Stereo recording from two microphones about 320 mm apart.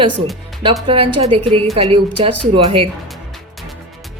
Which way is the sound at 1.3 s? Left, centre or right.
Centre.